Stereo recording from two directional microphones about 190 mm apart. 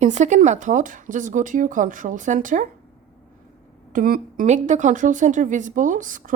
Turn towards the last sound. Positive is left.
turn(degrees=-45)  # may be behind; listen again after turning